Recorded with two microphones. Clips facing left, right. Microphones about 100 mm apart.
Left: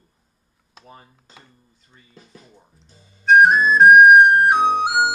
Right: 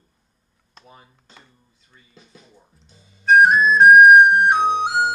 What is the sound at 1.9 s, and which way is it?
Speech, 40° left (ahead or behind).